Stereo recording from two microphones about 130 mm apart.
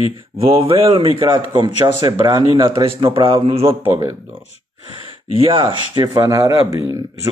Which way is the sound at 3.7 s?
20° right (ahead or behind).